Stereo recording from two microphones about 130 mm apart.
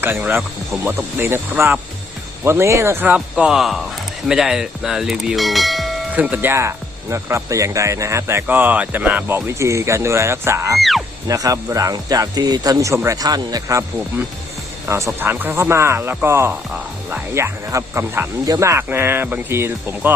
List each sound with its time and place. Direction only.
0.0 s speech: 15° right (ahead or behind)
3.2 s speech: 5° right (ahead or behind)
6.1 s speech: 10° right (ahead or behind)
10.8 s speech: centre (ahead or behind)
11.3 s speech: 25° right (ahead or behind)